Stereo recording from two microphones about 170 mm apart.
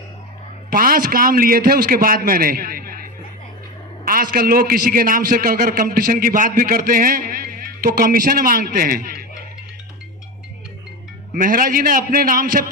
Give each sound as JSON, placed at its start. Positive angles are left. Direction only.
{"t": 0.7, "sound": "a man's voice", "side_deg": -55}
{"t": 4.0, "sound": "a man's voice", "side_deg": -55}
{"t": 11.3, "sound": "a man's voice", "side_deg": -55}